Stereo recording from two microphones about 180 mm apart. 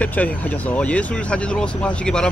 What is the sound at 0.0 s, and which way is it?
Speech, 10° left (ahead or behind).